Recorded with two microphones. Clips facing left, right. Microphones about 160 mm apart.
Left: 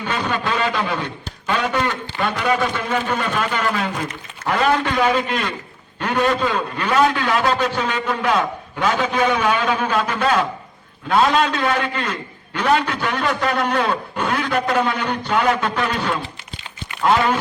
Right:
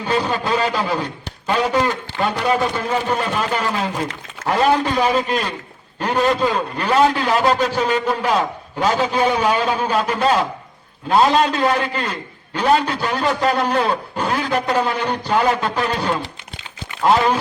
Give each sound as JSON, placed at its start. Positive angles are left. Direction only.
{"t": 0.1, "sound": "a man's voice", "side_deg": -35}